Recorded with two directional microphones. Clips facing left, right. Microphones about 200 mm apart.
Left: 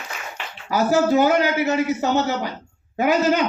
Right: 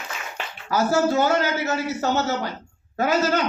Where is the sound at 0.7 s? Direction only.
15° left (ahead or behind).